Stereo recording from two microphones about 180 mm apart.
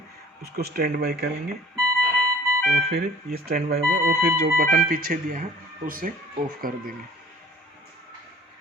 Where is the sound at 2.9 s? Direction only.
60° right (ahead or behind).